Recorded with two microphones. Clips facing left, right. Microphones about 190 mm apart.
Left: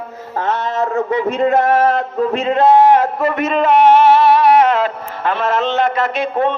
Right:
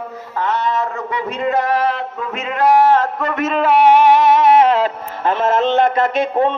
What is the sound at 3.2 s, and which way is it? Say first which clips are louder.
A man's voice: left 2 dB; centre (ahead or behind).